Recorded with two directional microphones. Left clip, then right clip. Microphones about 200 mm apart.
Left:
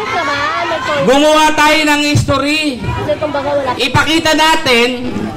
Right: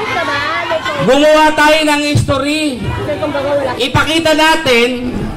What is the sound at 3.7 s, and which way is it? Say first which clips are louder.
Speech: left 1 dB; 20° left (ahead or behind).